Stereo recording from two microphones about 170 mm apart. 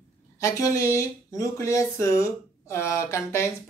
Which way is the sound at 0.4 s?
20° left (ahead or behind).